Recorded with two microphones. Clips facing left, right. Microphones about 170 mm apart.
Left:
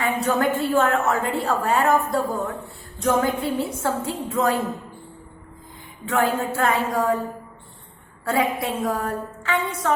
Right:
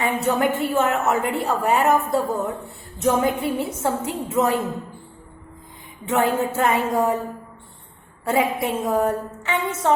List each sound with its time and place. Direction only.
0.0 s a woman's voice: 20° right (ahead or behind)
6.1 s a woman's voice: 20° right (ahead or behind)
8.2 s a woman's voice: 20° right (ahead or behind)